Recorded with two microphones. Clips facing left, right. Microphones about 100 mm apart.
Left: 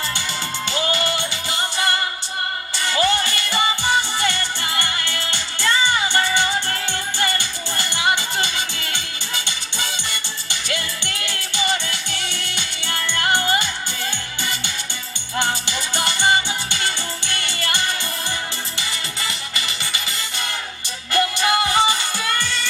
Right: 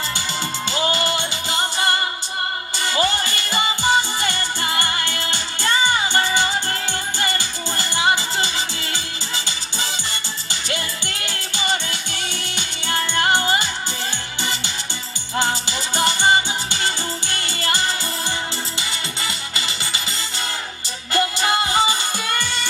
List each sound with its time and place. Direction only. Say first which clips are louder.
0.7 s music: right 1 dB; 30° right (ahead or behind)
10.5 s music: even; 35° right (ahead or behind)
12.1 s music: even; 20° right (ahead or behind)
15.4 s music: right 1 dB; 30° right (ahead or behind)
21.1 s music: left 1 dB; 25° right (ahead or behind)